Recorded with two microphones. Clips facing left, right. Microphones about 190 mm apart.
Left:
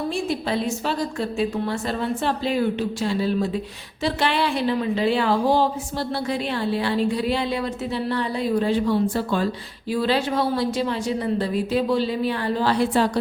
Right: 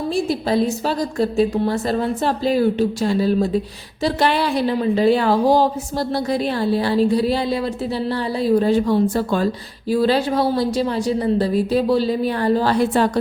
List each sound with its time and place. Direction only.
0.1 s a woman's voice: 35° right (ahead or behind)